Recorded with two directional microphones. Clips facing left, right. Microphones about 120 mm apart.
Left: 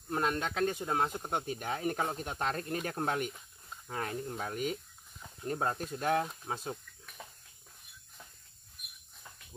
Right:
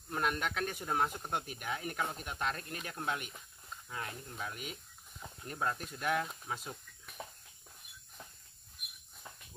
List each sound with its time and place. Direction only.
0.1 s speech: 30° left (ahead or behind)
1.6 s speech: 35° left (ahead or behind)
7.2 s a sound: 25° right (ahead or behind)